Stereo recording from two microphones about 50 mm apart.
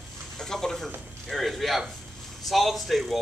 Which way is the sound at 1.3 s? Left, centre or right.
Centre.